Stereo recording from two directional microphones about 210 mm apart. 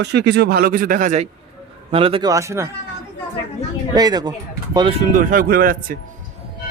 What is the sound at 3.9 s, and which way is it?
Speech, 20° right (ahead or behind).